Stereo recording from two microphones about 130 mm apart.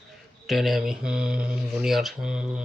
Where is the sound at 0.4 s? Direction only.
Centre (ahead or behind).